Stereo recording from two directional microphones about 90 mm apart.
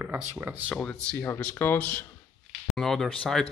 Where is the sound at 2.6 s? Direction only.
5° left (ahead or behind).